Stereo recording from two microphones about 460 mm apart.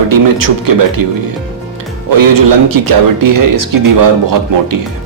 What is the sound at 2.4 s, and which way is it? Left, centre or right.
Speech, right.